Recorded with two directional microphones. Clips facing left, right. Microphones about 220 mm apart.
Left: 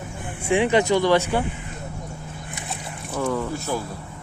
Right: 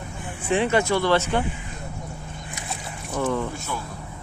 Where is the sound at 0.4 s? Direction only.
15° left (ahead or behind).